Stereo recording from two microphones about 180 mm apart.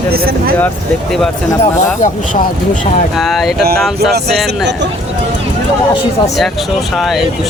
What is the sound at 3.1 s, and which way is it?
Speech, centre (ahead or behind).